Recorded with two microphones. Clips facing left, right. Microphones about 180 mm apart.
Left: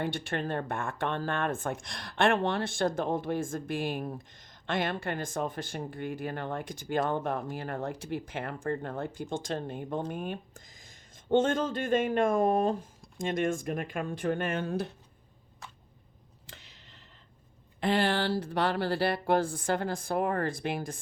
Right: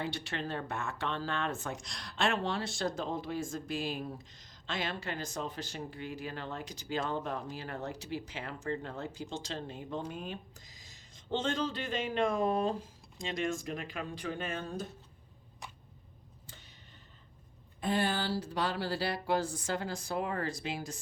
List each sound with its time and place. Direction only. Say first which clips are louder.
0.0 s speech: left 5 dB; 50° left (ahead or behind)
16.5 s a sound: left 4 dB; 80° left
17.7 s speech: left 5 dB; 75° left (ahead or behind); by 21.0 s 55° left (ahead or behind)